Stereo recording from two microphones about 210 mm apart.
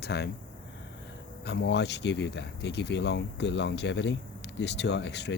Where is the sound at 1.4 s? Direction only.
55° left (ahead or behind).